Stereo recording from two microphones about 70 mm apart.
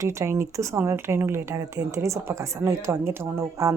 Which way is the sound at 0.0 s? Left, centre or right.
Right.